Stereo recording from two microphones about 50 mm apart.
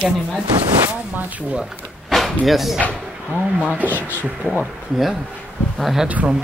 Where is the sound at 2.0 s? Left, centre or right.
Centre.